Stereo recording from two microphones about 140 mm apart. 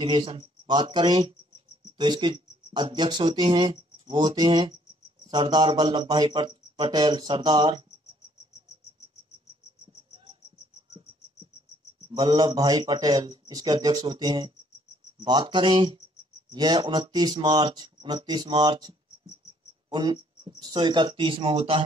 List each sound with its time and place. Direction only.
0.0 s speech: 35° right (ahead or behind)
12.2 s a man's voice: 30° right (ahead or behind)